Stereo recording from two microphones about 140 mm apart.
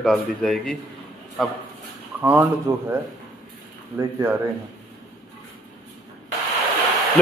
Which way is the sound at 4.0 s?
20° right (ahead or behind).